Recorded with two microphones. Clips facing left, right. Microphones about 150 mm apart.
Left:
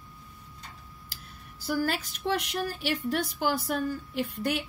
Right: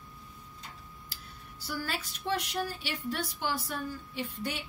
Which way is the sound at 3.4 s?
65° left (ahead or behind).